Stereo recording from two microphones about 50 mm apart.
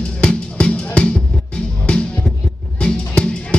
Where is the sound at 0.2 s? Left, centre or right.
Left.